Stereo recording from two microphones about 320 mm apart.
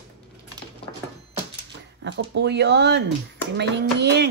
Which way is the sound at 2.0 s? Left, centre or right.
Right.